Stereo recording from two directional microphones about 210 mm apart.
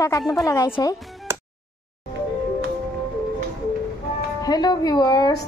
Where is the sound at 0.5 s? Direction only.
15° left (ahead or behind).